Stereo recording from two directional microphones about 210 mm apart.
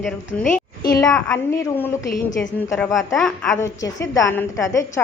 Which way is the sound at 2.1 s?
40° left (ahead or behind).